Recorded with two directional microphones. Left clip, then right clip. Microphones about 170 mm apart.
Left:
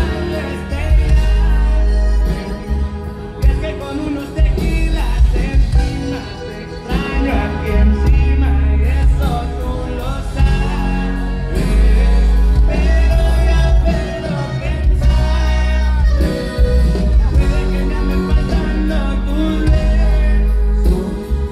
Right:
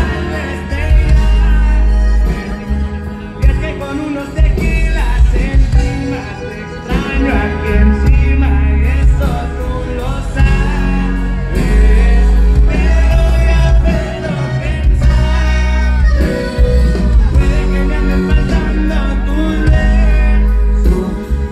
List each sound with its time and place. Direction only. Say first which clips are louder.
6.9 s music: right 3 dB; 20° right (ahead or behind)
10.4 s music: right 3 dB; 25° right (ahead or behind)
16.2 s music: right 3 dB; 25° right (ahead or behind)